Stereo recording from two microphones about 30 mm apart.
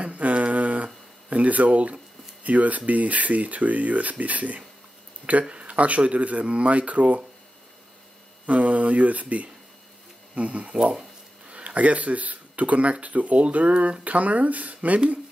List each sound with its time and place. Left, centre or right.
0.0 s a sound: right
1.3 s speech: right
2.4 s speech: right
5.5 s speech: right
8.5 s speech: right
10.8 s speech: right
11.5 s speech: right